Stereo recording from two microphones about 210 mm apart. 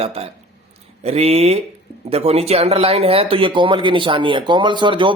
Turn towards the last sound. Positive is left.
turn(degrees=-25)  # may be behind; listen again after turning